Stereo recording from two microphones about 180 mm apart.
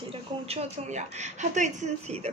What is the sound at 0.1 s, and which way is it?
A woman's voice, 35° right (ahead or behind).